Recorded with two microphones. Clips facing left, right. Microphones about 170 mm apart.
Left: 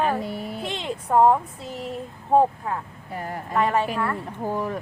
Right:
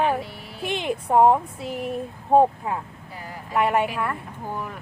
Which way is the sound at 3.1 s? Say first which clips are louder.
Left 9 dB; 55° left (ahead or behind).